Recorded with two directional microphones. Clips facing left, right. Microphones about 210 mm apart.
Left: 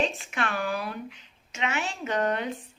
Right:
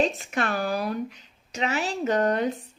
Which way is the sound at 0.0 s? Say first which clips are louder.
Right 4 dB; 40° right (ahead or behind).